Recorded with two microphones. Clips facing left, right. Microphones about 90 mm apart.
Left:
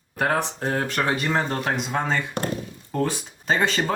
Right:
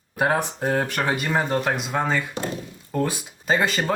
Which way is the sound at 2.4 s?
60° left (ahead or behind).